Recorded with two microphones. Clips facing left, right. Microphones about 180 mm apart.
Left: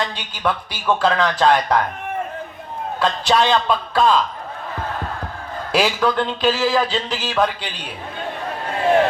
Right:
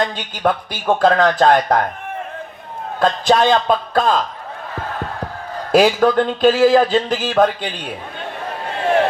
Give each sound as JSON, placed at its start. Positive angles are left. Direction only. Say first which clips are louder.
{"t": 0.0, "sound": "speech", "louder": "right 4 dB", "side_deg": -50}
{"t": 3.0, "sound": "speech", "louder": "right 4 dB", "side_deg": -50}
{"t": 5.7, "sound": "speech", "louder": "right 6 dB", "side_deg": -50}